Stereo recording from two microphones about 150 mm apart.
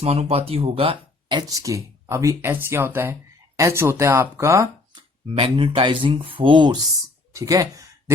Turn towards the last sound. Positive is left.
turn(degrees=-20)  # may be behind; listen again after turning